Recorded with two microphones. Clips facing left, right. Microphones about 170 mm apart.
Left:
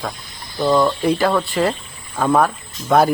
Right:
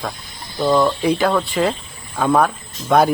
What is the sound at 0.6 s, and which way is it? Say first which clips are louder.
Speech: even; 5° right (ahead or behind).